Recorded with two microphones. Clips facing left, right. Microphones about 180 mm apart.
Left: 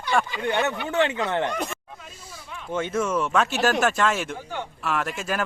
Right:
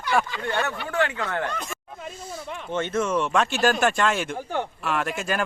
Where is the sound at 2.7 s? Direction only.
10° left (ahead or behind).